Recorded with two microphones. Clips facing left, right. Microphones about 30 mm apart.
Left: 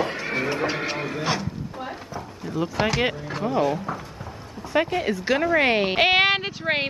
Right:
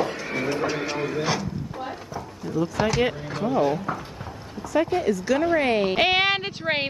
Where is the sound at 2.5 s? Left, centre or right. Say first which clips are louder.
Even; left.